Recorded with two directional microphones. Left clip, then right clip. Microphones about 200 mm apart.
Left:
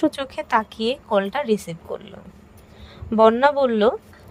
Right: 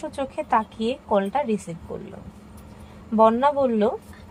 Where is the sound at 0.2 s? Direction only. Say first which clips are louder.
Left 1 dB; 55° left (ahead or behind).